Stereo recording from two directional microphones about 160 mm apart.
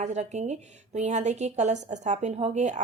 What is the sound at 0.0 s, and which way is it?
Speech, 45° right (ahead or behind).